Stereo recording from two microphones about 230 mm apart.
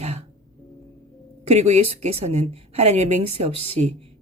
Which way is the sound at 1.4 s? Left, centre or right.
Right.